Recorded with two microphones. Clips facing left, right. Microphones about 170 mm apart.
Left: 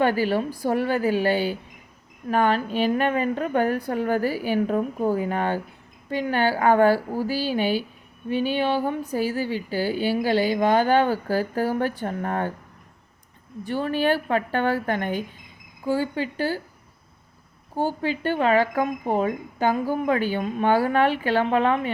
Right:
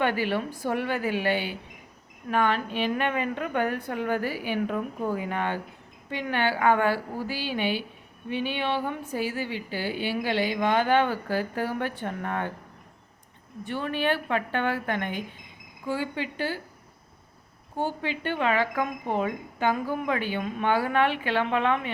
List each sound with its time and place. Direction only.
0.0 s speech: 40° left (ahead or behind)
13.7 s speech: 40° left (ahead or behind)
17.7 s speech: 40° left (ahead or behind)